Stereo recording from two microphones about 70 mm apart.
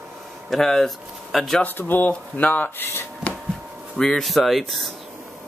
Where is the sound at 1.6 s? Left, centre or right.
Left.